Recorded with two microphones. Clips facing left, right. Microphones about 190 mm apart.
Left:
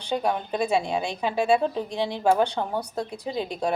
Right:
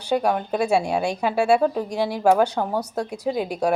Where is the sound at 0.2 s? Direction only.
75° right (ahead or behind).